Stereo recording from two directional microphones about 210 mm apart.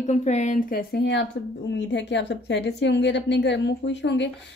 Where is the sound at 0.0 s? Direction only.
35° left (ahead or behind).